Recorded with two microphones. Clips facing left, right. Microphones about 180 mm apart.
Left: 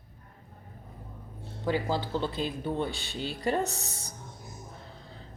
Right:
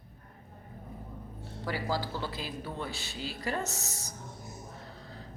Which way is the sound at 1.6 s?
20° left (ahead or behind).